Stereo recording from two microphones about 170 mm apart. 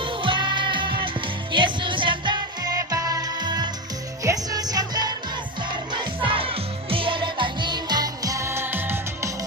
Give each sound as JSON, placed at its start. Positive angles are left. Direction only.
{"t": 0.0, "sound": "music", "side_deg": -30}